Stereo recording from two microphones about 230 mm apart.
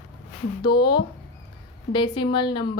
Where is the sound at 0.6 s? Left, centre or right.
Centre.